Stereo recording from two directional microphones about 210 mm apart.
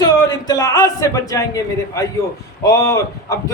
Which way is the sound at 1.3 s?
15° left (ahead or behind).